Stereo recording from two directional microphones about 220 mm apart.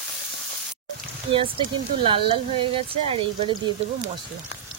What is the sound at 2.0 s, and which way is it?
Speech, 25° right (ahead or behind).